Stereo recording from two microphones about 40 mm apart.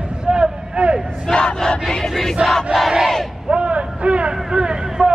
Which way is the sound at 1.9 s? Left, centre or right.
Centre.